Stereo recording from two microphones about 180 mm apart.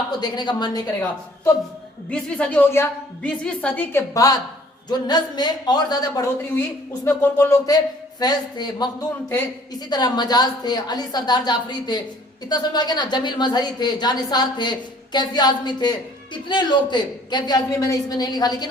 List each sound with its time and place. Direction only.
0.2 s a woman's voice: 25° left (ahead or behind)
2.0 s a woman's voice: 5° left (ahead or behind)
8.2 s a woman's voice: 25° left (ahead or behind)